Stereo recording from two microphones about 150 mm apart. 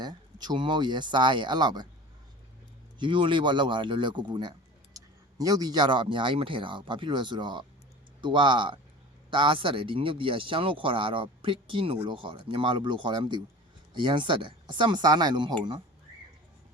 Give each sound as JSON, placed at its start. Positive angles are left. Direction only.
{"t": 0.0, "sound": "speech", "side_deg": -30}
{"t": 3.0, "sound": "speech", "side_deg": -30}